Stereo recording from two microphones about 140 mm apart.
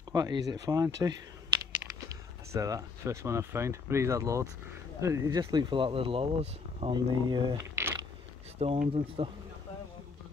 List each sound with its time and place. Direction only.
0.1 s speech: 30° right (ahead or behind)
7.7 s a sound: 20° right (ahead or behind)
8.6 s speech: 45° right (ahead or behind)